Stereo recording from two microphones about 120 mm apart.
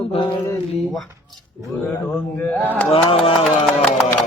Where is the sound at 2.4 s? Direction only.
10° left (ahead or behind).